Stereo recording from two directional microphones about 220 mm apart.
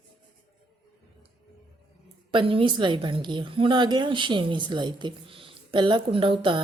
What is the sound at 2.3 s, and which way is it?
A woman's voice, 25° right (ahead or behind).